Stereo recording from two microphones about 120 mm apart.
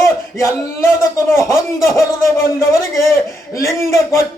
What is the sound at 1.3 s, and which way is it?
A man's voice, 25° left (ahead or behind).